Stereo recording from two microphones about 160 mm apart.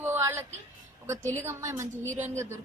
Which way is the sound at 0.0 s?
15° right (ahead or behind).